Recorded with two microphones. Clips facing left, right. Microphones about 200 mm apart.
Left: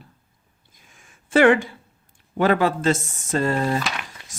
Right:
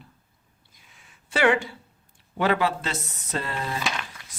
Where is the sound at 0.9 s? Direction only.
50° left (ahead or behind).